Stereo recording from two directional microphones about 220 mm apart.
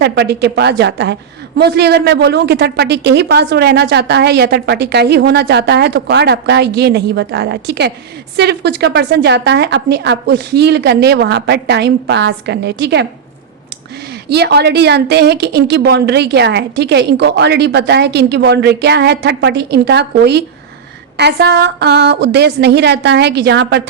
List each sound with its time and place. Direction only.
0.0 s a man's voice: 50° right (ahead or behind)
14.3 s a man's voice: 50° right (ahead or behind)